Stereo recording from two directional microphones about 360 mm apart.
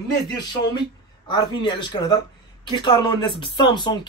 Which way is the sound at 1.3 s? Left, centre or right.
Centre.